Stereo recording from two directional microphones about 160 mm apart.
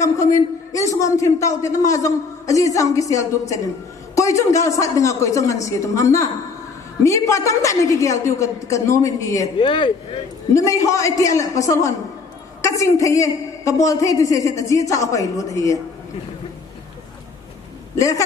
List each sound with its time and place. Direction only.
0.0 s a man's voice: 20° left (ahead or behind)
9.6 s speech: 30° left (ahead or behind)
10.5 s a man's voice: 20° left (ahead or behind)
17.9 s a man's voice: 20° left (ahead or behind)